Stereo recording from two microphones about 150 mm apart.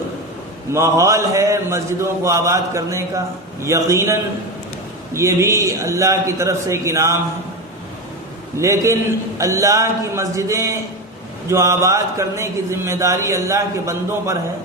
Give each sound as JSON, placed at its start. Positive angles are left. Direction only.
{"t": 0.7, "sound": "speech", "side_deg": -20}
{"t": 8.5, "sound": "speech", "side_deg": -20}